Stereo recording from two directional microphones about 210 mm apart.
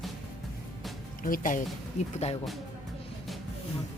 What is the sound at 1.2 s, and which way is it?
Speech, 40° left (ahead or behind).